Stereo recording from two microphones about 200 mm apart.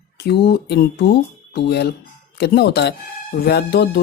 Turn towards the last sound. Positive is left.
turn(degrees=55)  # may be behind; listen again after turning